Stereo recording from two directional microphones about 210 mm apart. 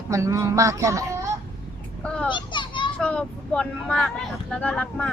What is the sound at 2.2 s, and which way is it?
Children playing, 20° left (ahead or behind).